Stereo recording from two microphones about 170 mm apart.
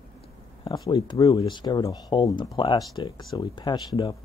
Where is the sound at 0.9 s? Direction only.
25° left (ahead or behind).